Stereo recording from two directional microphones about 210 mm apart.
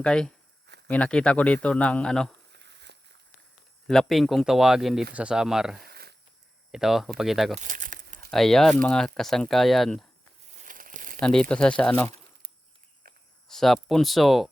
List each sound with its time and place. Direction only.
0.0 s speech: 5° left (ahead or behind)
2.5 s a sound: 55° right (ahead or behind)
3.8 s speech: centre (ahead or behind)
5.9 s a sound: 50° right (ahead or behind)
6.7 s speech: centre (ahead or behind)
7.6 s crumpling: 35° right (ahead or behind)
8.3 s speech: centre (ahead or behind)
10.6 s crumpling: 40° right (ahead or behind)
11.2 s speech: 5° left (ahead or behind)
13.5 s speech: centre (ahead or behind)